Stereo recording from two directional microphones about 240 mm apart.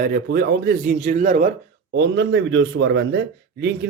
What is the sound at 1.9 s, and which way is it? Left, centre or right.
A man's voice, right.